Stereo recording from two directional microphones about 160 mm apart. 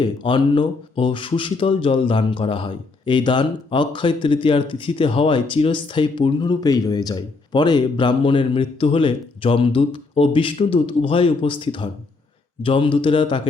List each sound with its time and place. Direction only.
0.0 s speech: 30° left (ahead or behind)